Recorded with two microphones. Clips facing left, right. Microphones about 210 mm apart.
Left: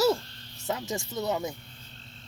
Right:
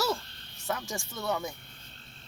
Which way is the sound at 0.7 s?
20° left (ahead or behind).